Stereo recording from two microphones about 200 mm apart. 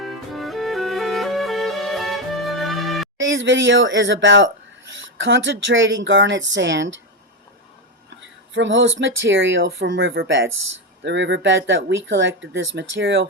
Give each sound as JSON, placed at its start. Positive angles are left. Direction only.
{"t": 0.0, "sound": "music", "side_deg": 0}
{"t": 3.2, "sound": "speech", "side_deg": -70}
{"t": 8.5, "sound": "speech", "side_deg": -70}